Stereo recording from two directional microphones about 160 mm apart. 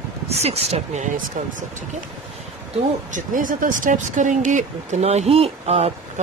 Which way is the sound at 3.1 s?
55° right (ahead or behind).